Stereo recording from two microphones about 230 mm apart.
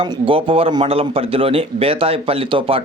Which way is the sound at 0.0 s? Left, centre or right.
Right.